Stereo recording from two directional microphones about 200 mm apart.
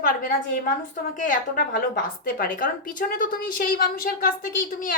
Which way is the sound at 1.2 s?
40° left (ahead or behind).